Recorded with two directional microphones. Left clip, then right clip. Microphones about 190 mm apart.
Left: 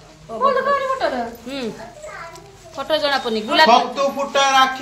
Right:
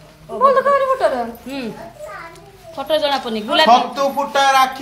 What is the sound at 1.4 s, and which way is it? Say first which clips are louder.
Speech: even; 5° left (ahead or behind).